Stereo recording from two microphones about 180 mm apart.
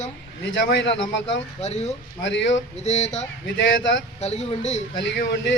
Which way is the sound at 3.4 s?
80° left.